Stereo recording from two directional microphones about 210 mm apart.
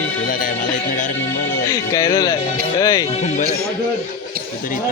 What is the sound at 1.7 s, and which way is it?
A man's voice, 15° left (ahead or behind).